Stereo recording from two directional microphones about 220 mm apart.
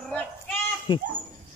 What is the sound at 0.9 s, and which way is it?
Speech, 20° left (ahead or behind).